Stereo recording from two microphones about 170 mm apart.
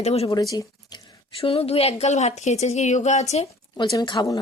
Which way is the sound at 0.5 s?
20° left (ahead or behind).